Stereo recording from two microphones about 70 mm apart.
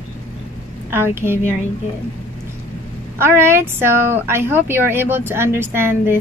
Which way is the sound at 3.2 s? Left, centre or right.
Right.